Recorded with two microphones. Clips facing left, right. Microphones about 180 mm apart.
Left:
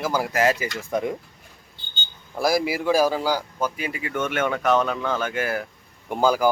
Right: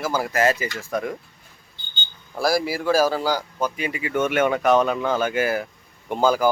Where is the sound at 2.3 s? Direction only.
20° left (ahead or behind); by 5.7 s 5° right (ahead or behind).